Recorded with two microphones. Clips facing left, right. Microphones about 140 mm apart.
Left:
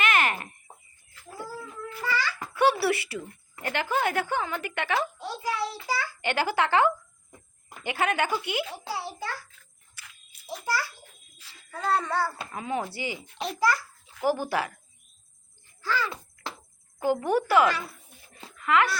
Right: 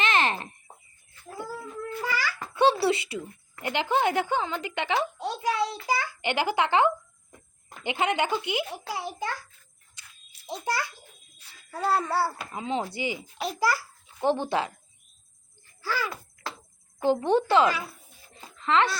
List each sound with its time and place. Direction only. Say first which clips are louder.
0.0 s chicken: even; 25° right (ahead or behind)
2.0 s babbling: left 2 dB; 10° right (ahead or behind)
2.5 s a sound: right 1 dB; 25° right (ahead or behind)
3.6 s speech: right 2 dB; 20° right (ahead or behind)
8.9 s a sound: right 2 dB; 15° right (ahead or behind)
10.4 s a child's voice: right 1 dB; 20° right (ahead or behind)
11.7 s a child's voice: right 1 dB; 5° right (ahead or behind)
12.5 s speech: right 1 dB; 20° right (ahead or behind)
13.4 s a child's voice: left 1 dB; centre (ahead or behind)
14.2 s speech: right 1 dB; 25° right (ahead or behind)
15.8 s a child's voice: left 1 dB; 10° right (ahead or behind)
16.0 s a sound: even; 20° left (ahead or behind)
17.0 s speech: right 2 dB; 25° right (ahead or behind)